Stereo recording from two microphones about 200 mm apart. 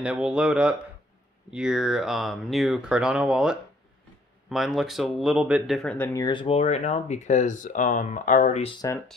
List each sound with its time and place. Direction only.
0.0 s speech: 5° right (ahead or behind); by 6.2 s 10° left (ahead or behind)
6.2 s speech: 25° left (ahead or behind)
8.8 s speech: 10° left (ahead or behind)